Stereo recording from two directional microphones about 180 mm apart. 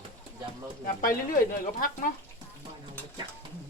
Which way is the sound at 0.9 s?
50° left (ahead or behind).